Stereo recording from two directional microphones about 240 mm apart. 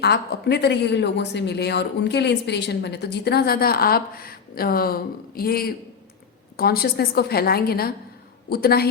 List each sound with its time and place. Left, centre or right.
0.0 s a woman's voice: left